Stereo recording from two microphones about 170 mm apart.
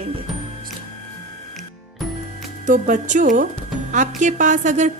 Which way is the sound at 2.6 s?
45° right (ahead or behind).